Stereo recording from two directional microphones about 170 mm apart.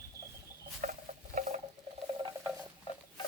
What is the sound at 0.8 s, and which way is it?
Patter, 50° right (ahead or behind).